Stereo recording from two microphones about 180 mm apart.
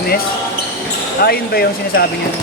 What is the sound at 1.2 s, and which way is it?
Speech, 60° left (ahead or behind).